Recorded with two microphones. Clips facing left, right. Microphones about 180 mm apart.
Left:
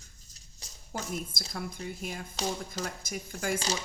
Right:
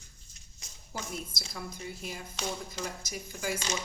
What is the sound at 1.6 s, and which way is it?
Speech, 55° left (ahead or behind).